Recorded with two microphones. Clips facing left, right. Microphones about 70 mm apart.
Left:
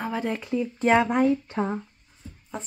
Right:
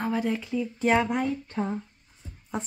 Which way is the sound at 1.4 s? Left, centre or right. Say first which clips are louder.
Left 2 dB; left.